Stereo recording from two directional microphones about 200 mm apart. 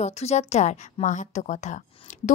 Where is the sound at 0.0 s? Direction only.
35° left (ahead or behind).